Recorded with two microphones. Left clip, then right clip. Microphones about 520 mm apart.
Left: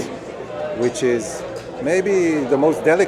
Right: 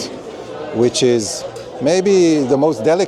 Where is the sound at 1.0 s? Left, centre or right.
Right.